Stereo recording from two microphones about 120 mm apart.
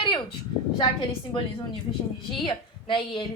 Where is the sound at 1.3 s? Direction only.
45° left (ahead or behind).